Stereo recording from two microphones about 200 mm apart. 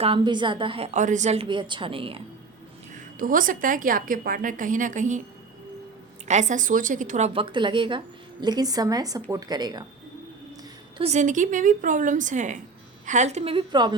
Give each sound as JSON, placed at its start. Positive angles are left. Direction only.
{"t": 0.0, "sound": "a woman's voice", "side_deg": -25}
{"t": 2.9, "sound": "a woman's voice", "side_deg": -45}
{"t": 6.2, "sound": "speech", "side_deg": -35}
{"t": 7.3, "sound": "a woman's voice", "side_deg": -25}
{"t": 10.9, "sound": "a woman's voice", "side_deg": -30}